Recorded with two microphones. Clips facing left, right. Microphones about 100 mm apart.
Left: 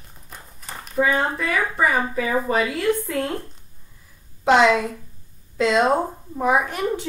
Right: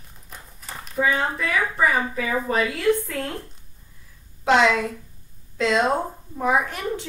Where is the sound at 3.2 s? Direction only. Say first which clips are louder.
Left 4 dB; 25° left (ahead or behind).